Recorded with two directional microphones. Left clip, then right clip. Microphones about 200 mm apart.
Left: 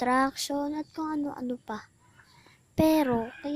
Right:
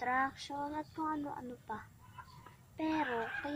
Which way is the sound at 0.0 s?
45° left (ahead or behind).